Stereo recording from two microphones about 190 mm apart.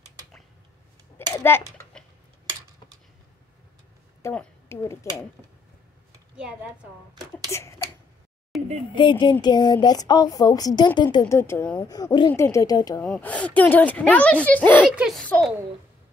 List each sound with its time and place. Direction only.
1.1 s a sound: 10° left (ahead or behind)
4.2 s a woman's voice: 10° left (ahead or behind)
6.3 s a woman's voice: 5° right (ahead or behind)
7.4 s speech: 15° left (ahead or behind)
8.5 s a sound: centre (ahead or behind)
9.2 s speech: 25° left (ahead or behind)
11.9 s speech: 20° left (ahead or behind)
13.0 s a woman's voice: 5° left (ahead or behind)